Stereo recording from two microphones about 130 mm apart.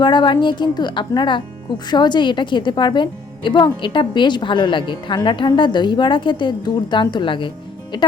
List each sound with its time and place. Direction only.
0.0 s a woman's voice: 35° left (ahead or behind)